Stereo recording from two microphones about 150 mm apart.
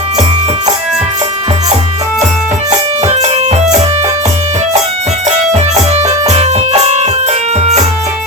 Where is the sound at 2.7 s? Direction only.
50° right (ahead or behind).